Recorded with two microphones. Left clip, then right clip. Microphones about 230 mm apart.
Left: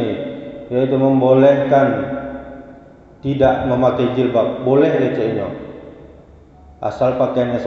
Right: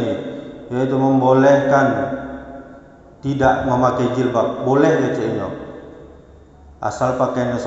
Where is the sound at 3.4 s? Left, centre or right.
Right.